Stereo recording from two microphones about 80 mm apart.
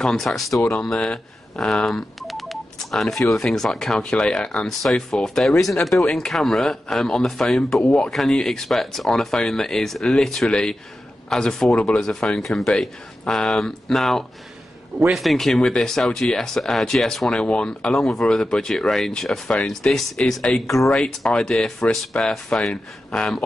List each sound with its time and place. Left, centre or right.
0.0 s speech: centre
0.5 s speech: left
0.8 s speech: centre